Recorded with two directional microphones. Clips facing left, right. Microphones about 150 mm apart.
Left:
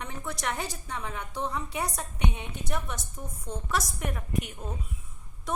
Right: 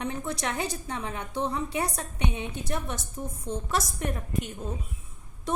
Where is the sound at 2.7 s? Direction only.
25° right (ahead or behind).